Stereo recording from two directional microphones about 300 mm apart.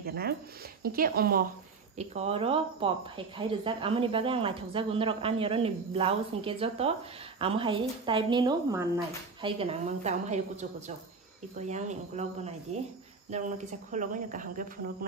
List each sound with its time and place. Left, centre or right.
0.0 s speech: right